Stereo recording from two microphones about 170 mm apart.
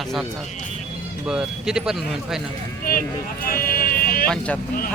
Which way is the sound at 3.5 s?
60° left (ahead or behind).